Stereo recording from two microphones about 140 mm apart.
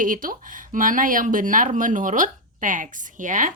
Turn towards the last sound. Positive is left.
turn(degrees=-65)  # may be behind; listen again after turning